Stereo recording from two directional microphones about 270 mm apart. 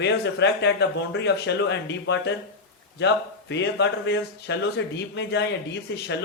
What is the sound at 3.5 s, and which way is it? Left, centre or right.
Speech, left.